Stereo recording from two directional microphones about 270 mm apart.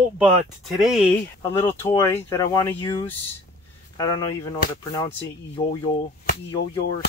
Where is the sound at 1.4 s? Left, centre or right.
Centre.